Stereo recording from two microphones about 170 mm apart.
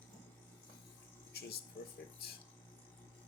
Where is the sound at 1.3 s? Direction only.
70° left (ahead or behind).